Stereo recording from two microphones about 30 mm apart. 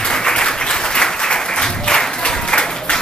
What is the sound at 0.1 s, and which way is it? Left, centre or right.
Applause, left.